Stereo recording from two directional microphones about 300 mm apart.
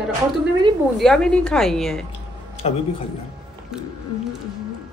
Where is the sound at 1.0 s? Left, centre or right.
Centre.